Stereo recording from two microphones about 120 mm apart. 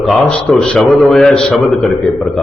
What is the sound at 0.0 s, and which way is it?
A man's voice, centre (ahead or behind).